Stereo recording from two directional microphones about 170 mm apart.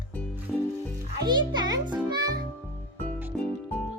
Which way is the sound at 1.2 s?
25° right (ahead or behind).